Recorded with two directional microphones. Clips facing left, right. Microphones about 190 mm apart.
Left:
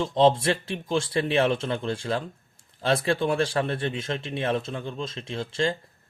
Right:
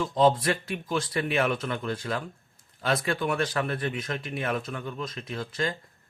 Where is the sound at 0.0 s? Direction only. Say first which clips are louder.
Left 2 dB; 25° left (ahead or behind).